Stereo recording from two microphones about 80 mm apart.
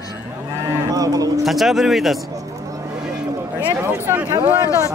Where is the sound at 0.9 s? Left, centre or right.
Right.